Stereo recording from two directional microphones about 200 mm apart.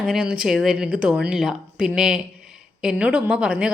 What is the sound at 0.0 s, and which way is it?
Speech, 5° right (ahead or behind).